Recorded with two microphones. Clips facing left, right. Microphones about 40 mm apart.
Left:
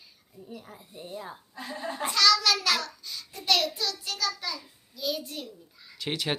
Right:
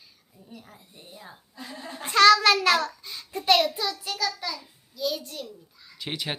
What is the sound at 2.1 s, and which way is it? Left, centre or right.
Child singing, right.